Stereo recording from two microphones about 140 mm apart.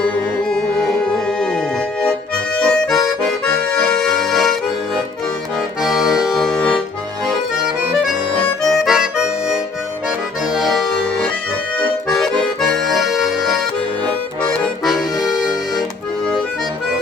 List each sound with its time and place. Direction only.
2.6 s accordion: 5° left (ahead or behind)
5.8 s accordion: 5° right (ahead or behind)
8.8 s accordion: 5° right (ahead or behind)